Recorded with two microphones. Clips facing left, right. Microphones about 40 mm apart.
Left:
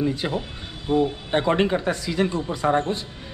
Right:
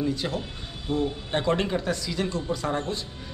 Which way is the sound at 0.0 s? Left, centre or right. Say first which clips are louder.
Left 3 dB; left.